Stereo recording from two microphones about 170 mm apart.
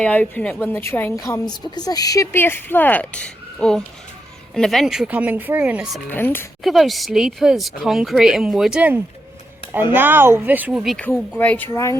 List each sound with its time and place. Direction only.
0.0 s a woman's voice: 10° left (ahead or behind)
6.1 s a woman's voice: 10° left (ahead or behind)
6.6 s a woman's voice: centre (ahead or behind)
10.9 s a woman's voice: 10° left (ahead or behind)